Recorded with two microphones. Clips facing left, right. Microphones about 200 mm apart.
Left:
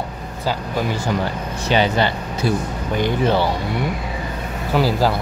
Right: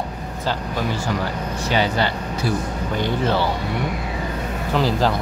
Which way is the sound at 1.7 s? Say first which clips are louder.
Left 3 dB; 20° left (ahead or behind).